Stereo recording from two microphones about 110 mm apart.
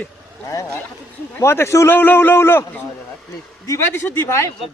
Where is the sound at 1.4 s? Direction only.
20° left (ahead or behind).